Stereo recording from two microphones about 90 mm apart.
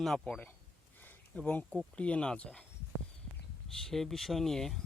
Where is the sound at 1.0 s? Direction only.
20° left (ahead or behind).